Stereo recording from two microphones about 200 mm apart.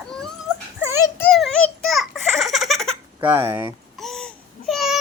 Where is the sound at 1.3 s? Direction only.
Centre (ahead or behind).